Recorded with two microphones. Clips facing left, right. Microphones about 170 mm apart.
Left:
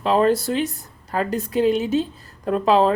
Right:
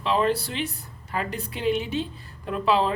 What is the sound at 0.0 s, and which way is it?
Speech, 45° left (ahead or behind).